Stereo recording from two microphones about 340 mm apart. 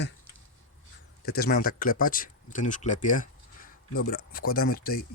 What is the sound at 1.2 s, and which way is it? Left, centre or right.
Speech, left.